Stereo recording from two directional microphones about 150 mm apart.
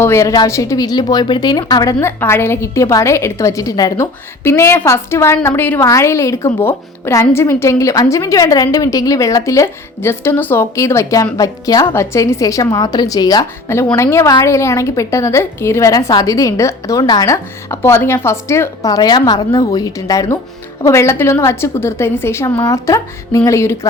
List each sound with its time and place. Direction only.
0.0 s a woman's voice: 20° left (ahead or behind)